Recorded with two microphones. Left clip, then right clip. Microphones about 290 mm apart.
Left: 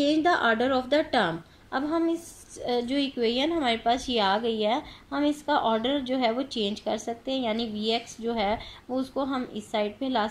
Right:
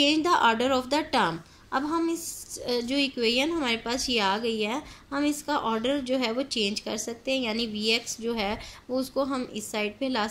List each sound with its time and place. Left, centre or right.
0.0 s a woman's voice: centre